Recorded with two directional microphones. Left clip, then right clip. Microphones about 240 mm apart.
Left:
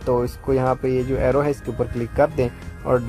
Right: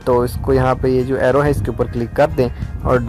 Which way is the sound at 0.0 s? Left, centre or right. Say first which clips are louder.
Right 5 dB; centre.